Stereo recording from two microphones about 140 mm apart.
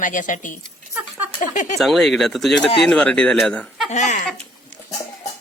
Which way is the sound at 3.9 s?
60° left (ahead or behind).